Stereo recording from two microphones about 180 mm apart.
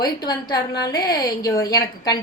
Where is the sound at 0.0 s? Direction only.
20° left (ahead or behind).